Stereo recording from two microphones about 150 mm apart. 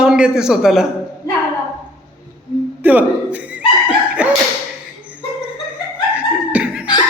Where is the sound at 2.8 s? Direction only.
10° right (ahead or behind).